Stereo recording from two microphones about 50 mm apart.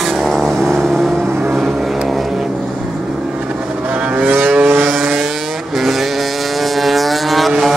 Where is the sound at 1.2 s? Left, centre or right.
Right.